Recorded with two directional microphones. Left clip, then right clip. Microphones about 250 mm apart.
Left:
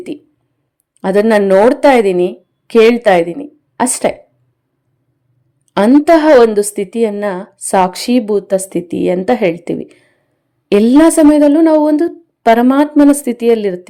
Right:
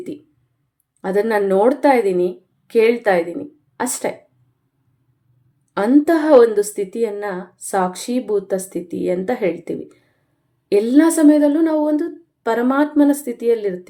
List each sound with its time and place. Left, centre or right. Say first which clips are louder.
1.0 s a woman's voice: left 7 dB; left
5.7 s a woman's voice: left 7 dB; left